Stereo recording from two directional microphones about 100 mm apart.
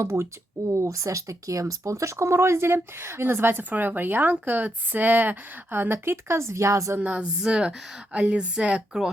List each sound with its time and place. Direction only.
0.0 s speech: 25° right (ahead or behind)
7.0 s a woman's voice: 10° right (ahead or behind)